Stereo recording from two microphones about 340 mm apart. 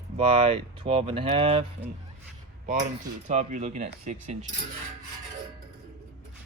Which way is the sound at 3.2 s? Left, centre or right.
Right.